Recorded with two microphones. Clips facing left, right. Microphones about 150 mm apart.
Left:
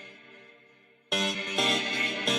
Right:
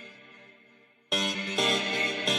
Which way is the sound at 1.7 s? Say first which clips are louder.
Right 2 dB; 25° right (ahead or behind).